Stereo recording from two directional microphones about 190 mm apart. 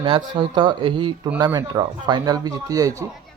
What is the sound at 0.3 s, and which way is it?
Speech, 25° right (ahead or behind).